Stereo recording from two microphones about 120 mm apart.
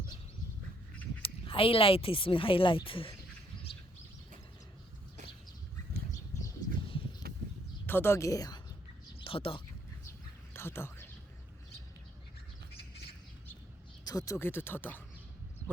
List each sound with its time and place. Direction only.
1.2 s speech: 50° left (ahead or behind)
3.7 s bird: 45° left (ahead or behind)
6.1 s a sound: 25° left (ahead or behind)
7.9 s speech: 20° left (ahead or behind)
9.2 s speech: 50° left (ahead or behind)
10.5 s whispering: 20° left (ahead or behind)
14.0 s speech: 30° left (ahead or behind)